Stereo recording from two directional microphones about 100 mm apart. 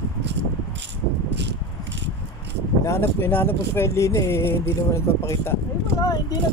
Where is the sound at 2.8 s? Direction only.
25° left (ahead or behind).